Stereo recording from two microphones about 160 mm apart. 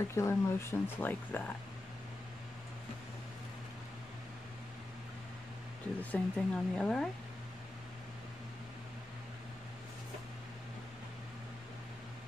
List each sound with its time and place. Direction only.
0.0 s speech: 15° left (ahead or behind)
6.1 s speech: 5° left (ahead or behind)